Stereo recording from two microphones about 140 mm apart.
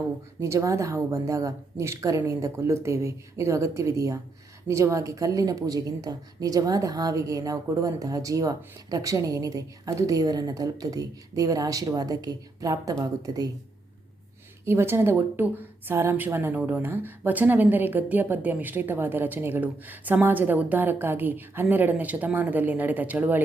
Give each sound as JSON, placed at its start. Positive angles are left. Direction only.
{"t": 0.3, "sound": "a woman's voice", "side_deg": -20}
{"t": 14.6, "sound": "a woman's voice", "side_deg": -15}